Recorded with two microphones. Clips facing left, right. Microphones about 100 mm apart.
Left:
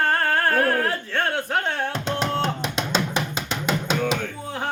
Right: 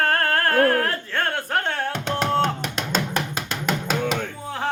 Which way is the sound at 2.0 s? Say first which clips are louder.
Right 5 dB; 50° right (ahead or behind).